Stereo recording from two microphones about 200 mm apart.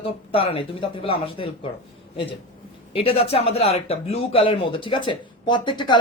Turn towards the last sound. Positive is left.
turn(degrees=25)  # may be behind; listen again after turning